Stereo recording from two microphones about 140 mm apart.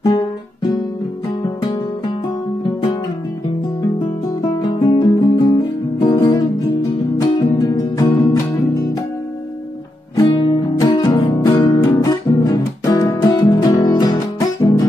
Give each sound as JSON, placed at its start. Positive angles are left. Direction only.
{"t": 1.4, "sound": "music", "side_deg": 35}
{"t": 4.0, "sound": "music", "side_deg": 30}
{"t": 10.1, "sound": "music", "side_deg": 30}